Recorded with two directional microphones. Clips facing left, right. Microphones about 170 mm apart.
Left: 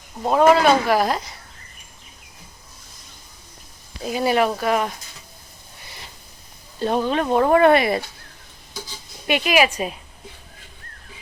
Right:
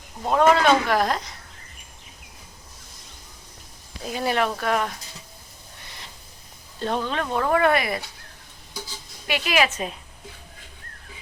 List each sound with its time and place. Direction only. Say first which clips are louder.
0.3 s speech: left 3 dB; 5° left (ahead or behind)
4.0 s speech: left 5 dB; 5° left (ahead or behind)
6.7 s speech: left 5 dB; 10° left (ahead or behind); by 8.0 s 25° left (ahead or behind)
9.2 s speech: left 4 dB; 20° left (ahead or behind)